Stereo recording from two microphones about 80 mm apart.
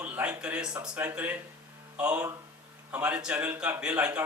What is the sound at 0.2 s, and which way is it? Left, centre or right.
Speech, centre.